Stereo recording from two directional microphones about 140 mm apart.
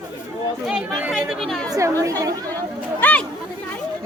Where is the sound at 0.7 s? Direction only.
5° right (ahead or behind).